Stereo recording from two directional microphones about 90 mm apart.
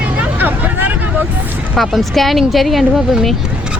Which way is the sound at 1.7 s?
Centre (ahead or behind).